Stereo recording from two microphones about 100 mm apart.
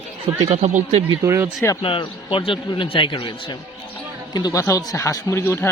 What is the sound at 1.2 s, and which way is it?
Speech, 30° right (ahead or behind).